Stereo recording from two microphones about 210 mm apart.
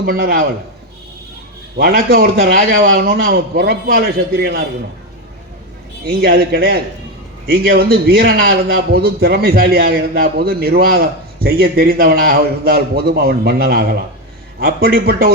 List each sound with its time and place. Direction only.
0.0 s a man's voice: 45° right (ahead or behind)
1.7 s a man's voice: 45° right (ahead or behind)
6.1 s a man's voice: 45° right (ahead or behind)